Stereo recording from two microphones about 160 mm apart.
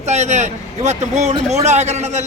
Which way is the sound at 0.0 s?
45° right (ahead or behind).